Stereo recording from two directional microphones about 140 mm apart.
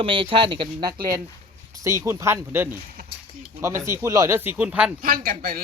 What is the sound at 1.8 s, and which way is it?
Speech, 20° right (ahead or behind).